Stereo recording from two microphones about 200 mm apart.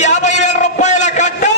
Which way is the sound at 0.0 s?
35° left (ahead or behind).